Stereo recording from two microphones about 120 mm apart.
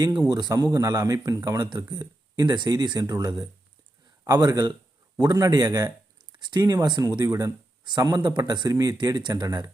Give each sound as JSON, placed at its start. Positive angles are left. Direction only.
{"t": 0.3, "sound": "a man's voice", "side_deg": -30}